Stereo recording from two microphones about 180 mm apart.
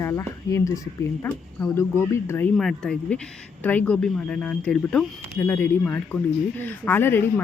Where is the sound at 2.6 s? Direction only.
5° left (ahead or behind).